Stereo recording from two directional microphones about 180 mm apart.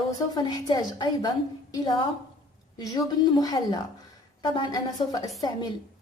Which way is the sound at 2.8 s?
20° left (ahead or behind).